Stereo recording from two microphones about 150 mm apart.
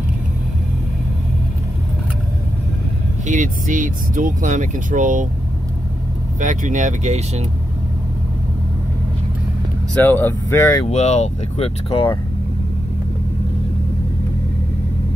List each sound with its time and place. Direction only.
3.3 s speech: 60° right (ahead or behind)
6.4 s speech: 55° right (ahead or behind)
10.0 s speech: 15° left (ahead or behind)
10.9 s speech: 50° left (ahead or behind)